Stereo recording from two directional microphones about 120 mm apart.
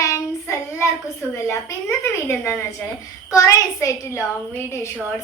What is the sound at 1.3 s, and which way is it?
A woman's voice, 25° left (ahead or behind).